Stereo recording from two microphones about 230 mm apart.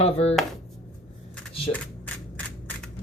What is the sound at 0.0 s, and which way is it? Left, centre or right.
Speech, left.